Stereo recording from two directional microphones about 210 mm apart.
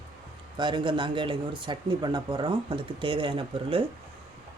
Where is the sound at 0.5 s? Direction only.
20° right (ahead or behind).